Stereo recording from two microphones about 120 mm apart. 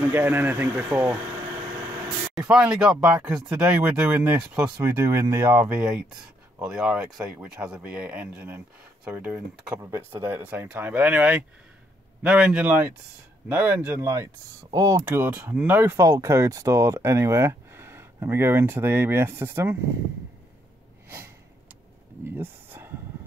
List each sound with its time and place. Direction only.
0.1 s speech: 15° right (ahead or behind)
2.3 s speech: 5° right (ahead or behind)
5.8 s speech: 5° right (ahead or behind)
22.3 s a sound: 20° right (ahead or behind)